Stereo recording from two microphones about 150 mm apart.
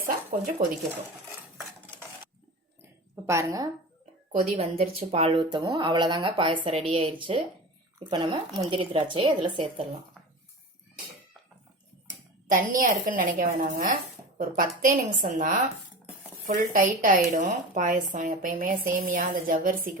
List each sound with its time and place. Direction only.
0.0 s a sound: 60° right (ahead or behind)
3.2 s a woman's voice: 20° right (ahead or behind)
4.3 s speech: 50° right (ahead or behind); by 9.8 s 35° right (ahead or behind)
12.5 s a woman's voice: 65° right (ahead or behind)